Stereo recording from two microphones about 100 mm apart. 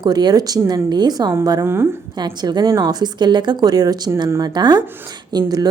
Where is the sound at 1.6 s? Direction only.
25° right (ahead or behind).